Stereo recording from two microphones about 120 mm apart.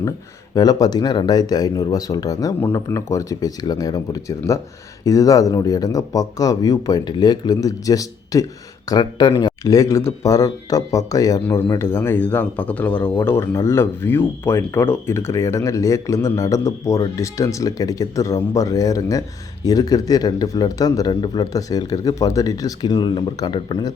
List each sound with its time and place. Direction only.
0.5 s a man's voice: 35° left (ahead or behind)